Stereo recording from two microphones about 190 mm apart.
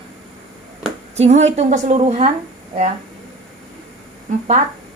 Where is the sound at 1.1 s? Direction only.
35° right (ahead or behind).